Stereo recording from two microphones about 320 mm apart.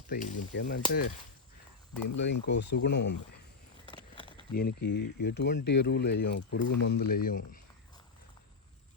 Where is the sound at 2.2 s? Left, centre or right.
Left.